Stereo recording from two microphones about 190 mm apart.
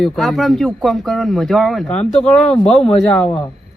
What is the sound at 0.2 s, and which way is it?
Speech, centre (ahead or behind).